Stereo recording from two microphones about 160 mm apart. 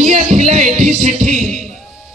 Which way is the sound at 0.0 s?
50° right (ahead or behind).